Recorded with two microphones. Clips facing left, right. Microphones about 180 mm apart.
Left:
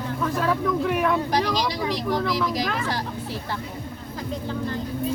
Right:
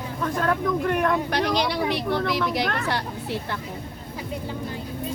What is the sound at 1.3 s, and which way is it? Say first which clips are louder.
Speech: even; 65° right (ahead or behind).